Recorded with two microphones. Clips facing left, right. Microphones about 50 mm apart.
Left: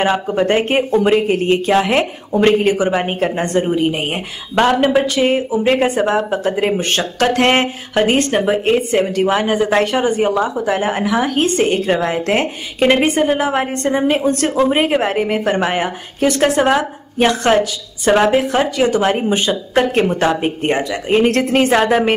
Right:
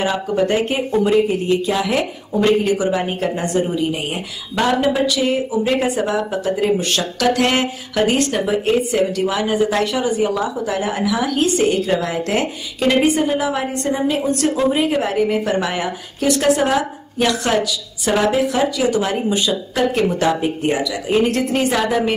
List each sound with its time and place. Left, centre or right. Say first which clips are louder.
0.3 s a woman's voice: left 3 dB; left